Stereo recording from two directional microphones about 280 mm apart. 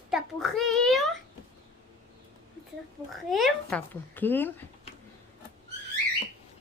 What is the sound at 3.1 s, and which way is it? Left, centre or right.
Speech, centre.